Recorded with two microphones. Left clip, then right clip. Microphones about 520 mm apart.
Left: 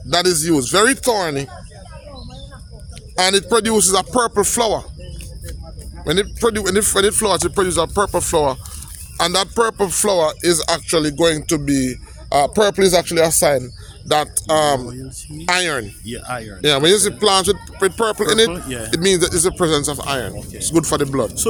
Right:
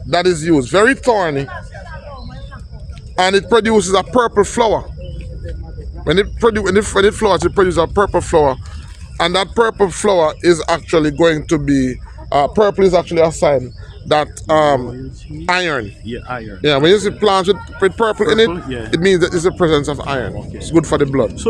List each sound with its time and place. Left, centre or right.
0.1 s a man's voice: left
3.2 s a man's voice: left
6.1 s a man's voice: left
16.0 s speech: left
16.6 s a man's voice: left
18.5 s speech: left
18.9 s a man's voice: left